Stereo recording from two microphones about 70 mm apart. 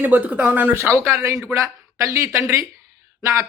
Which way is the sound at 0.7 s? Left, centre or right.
Right.